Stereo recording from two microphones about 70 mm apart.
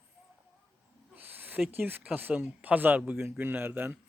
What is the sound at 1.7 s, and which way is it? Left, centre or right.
Speech, right.